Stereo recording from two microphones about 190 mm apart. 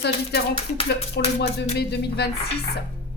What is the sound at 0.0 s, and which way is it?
Speech, 60° left (ahead or behind).